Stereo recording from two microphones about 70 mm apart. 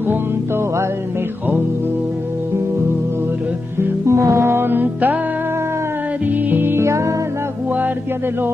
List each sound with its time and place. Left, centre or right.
4.0 s music: right
6.2 s music: right